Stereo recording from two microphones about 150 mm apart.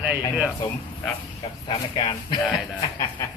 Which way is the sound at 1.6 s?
30° left (ahead or behind).